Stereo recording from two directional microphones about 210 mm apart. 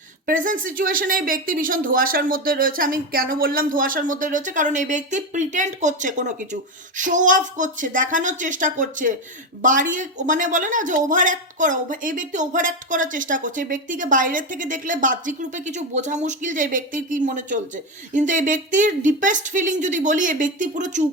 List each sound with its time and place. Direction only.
0.3 s speech: 40° right (ahead or behind)